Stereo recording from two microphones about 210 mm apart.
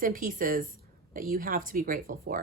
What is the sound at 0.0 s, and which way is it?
A woman's voice, 40° right (ahead or behind).